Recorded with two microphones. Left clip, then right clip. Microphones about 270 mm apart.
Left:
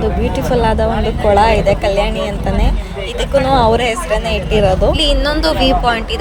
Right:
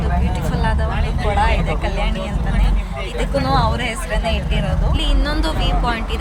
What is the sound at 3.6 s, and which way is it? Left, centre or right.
A woman's voice, centre.